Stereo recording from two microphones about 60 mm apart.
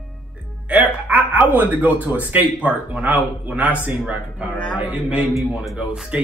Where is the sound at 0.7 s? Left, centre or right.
Right.